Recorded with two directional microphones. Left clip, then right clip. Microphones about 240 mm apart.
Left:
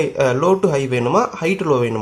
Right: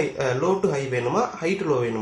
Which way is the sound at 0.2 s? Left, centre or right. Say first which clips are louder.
Left 9 dB; left.